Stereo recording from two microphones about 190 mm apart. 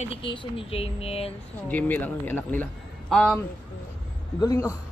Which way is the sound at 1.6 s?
10° left (ahead or behind).